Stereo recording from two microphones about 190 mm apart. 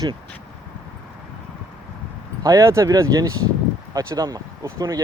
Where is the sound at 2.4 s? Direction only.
15° right (ahead or behind).